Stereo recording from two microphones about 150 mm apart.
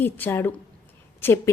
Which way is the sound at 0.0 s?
15° left (ahead or behind).